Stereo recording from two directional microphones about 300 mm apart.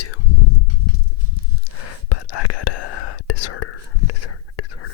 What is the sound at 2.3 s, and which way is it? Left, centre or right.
Whispering, left.